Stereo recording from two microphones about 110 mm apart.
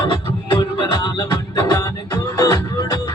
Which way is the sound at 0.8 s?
45° left (ahead or behind).